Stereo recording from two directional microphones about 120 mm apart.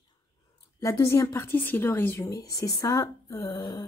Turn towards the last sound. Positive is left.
turn(degrees=30)  # may be behind; listen again after turning